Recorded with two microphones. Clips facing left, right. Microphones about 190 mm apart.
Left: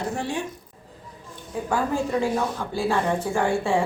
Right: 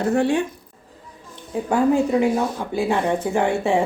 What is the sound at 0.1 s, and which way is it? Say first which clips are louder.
Speech: right 13 dB; 65° right (ahead or behind).